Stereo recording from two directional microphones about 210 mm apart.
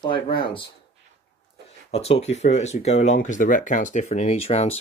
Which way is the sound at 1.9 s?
30° left (ahead or behind).